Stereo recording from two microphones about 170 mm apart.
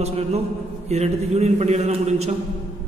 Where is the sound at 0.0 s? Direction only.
40° right (ahead or behind).